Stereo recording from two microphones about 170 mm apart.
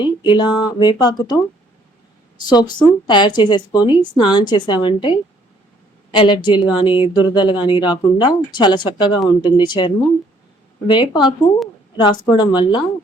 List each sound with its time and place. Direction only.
0.0 s speech: 25° left (ahead or behind)
2.5 s speech: 25° left (ahead or behind)